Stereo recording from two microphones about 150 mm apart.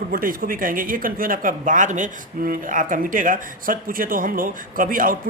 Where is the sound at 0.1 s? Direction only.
70° right (ahead or behind).